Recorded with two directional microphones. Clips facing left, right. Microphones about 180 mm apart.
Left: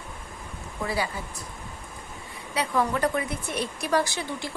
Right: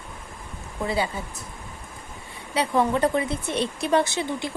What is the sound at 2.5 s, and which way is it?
Speech, 25° right (ahead or behind).